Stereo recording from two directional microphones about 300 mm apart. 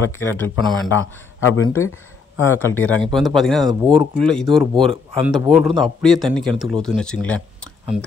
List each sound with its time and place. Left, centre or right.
0.2 s speech: centre
0.9 s a man's voice: left
2.4 s speech: centre
3.8 s speech: centre
4.2 s speech: centre